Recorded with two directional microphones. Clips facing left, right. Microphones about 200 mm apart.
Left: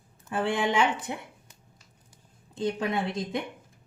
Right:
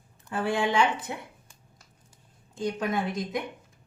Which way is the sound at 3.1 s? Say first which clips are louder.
Even; 30° left (ahead or behind).